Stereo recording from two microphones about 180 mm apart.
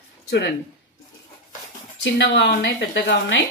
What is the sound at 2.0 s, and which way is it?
A woman's voice, 85° left.